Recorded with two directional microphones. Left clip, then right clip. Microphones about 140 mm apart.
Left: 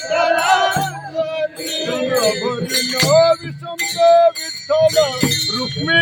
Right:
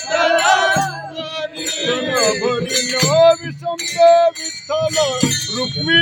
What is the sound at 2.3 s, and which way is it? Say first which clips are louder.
Music: right 1 dB; 25° right (ahead or behind).